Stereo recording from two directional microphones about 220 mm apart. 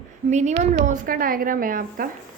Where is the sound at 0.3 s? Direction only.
30° right (ahead or behind).